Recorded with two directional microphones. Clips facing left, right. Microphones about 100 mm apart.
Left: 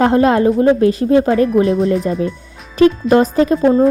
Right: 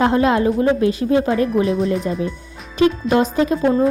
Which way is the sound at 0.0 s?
40° left (ahead or behind).